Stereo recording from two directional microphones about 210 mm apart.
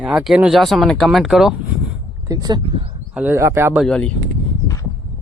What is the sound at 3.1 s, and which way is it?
Speech, 10° right (ahead or behind).